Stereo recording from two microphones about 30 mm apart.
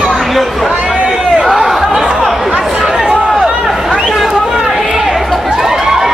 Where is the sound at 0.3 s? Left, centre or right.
Centre.